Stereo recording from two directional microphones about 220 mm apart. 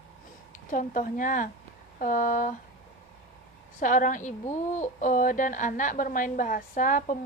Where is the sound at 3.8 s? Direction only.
35° left (ahead or behind).